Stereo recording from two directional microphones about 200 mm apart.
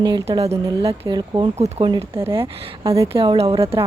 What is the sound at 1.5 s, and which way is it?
Speech, 35° right (ahead or behind).